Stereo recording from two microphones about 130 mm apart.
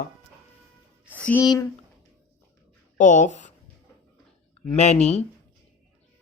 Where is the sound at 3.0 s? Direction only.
75° left (ahead or behind).